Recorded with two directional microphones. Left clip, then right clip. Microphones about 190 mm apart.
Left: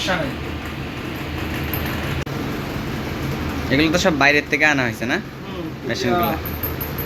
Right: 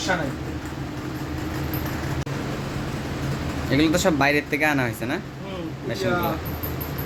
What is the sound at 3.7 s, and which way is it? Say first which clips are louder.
Speech: left 3 dB; 10° right (ahead or behind).